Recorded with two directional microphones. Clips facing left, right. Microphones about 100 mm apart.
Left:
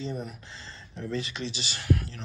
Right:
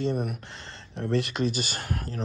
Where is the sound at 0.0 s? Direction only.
65° right (ahead or behind).